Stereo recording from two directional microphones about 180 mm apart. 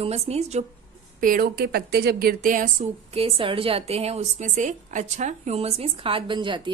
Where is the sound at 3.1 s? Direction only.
30° right (ahead or behind).